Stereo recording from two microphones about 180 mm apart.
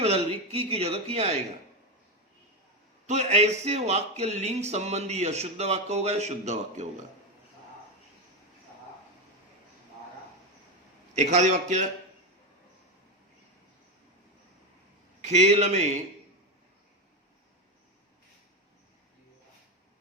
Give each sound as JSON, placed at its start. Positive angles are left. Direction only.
{"t": 0.0, "sound": "speech", "side_deg": -35}
{"t": 3.1, "sound": "speech", "side_deg": -40}
{"t": 11.1, "sound": "speech", "side_deg": -40}
{"t": 15.3, "sound": "speech", "side_deg": -40}